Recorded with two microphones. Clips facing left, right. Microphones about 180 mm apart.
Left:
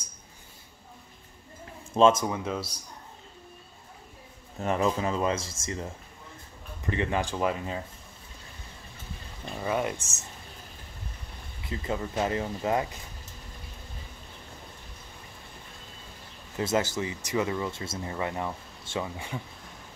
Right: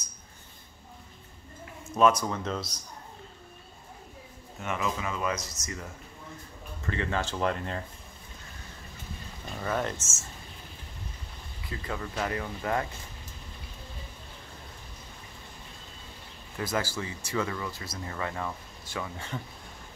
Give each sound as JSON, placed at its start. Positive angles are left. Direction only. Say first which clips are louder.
{"t": 2.0, "sound": "speech", "louder": "left 3 dB", "side_deg": 25}
{"t": 2.2, "sound": "speech", "louder": "left 2 dB", "side_deg": 10}
{"t": 4.6, "sound": "speech", "louder": "left 6 dB", "side_deg": 35}
{"t": 9.6, "sound": "speech", "louder": "left 2 dB", "side_deg": 10}
{"t": 11.6, "sound": "speech", "louder": "left 4 dB", "side_deg": 25}
{"t": 16.5, "sound": "speech", "louder": "left 4 dB", "side_deg": 20}